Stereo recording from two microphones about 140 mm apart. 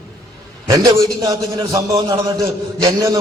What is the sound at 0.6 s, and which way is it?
A man's voice, 25° right (ahead or behind).